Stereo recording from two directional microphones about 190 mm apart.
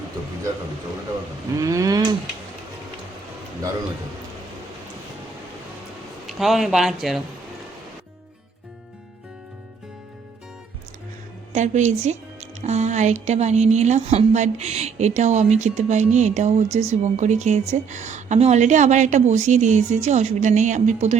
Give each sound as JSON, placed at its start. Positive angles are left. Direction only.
{"t": 1.5, "sound": "a sound", "side_deg": -15}
{"t": 6.2, "sound": "speech", "side_deg": 0}
{"t": 11.5, "sound": "speech", "side_deg": -40}